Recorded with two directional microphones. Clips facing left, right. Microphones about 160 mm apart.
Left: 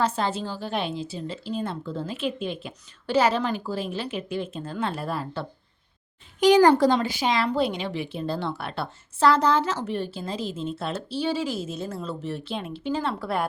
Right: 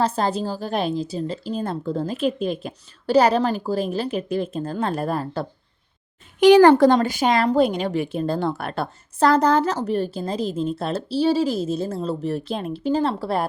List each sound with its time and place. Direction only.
0.2 s speech: 40° right (ahead or behind)
6.4 s speech: 60° right (ahead or behind); by 13.4 s 35° right (ahead or behind)